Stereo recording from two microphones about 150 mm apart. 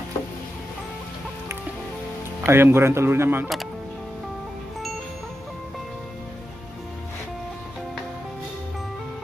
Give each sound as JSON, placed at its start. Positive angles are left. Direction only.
{"t": 2.4, "sound": "speech", "side_deg": -15}